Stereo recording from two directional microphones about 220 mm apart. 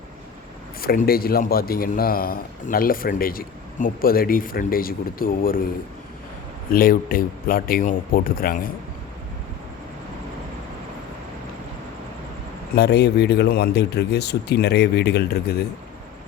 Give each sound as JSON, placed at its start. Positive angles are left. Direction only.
{"t": 0.8, "sound": "a man's voice", "side_deg": 45}
{"t": 6.7, "sound": "a man's voice", "side_deg": 40}
{"t": 12.7, "sound": "speech", "side_deg": 50}